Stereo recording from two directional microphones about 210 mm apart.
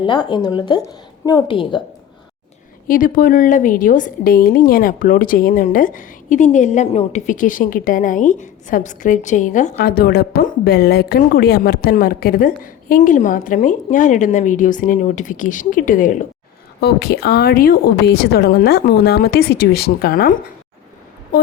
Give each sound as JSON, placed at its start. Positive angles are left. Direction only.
{"t": 0.0, "sound": "a woman's voice", "side_deg": 20}
{"t": 2.8, "sound": "a woman's voice", "side_deg": 40}
{"t": 9.7, "sound": "a woman's voice", "side_deg": 45}
{"t": 16.8, "sound": "a woman's voice", "side_deg": 50}
{"t": 21.3, "sound": "a sound", "side_deg": 40}